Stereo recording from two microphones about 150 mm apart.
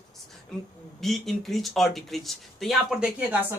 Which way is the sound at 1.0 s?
Centre (ahead or behind).